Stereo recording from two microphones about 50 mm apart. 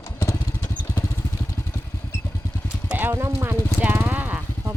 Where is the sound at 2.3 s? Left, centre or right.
Left.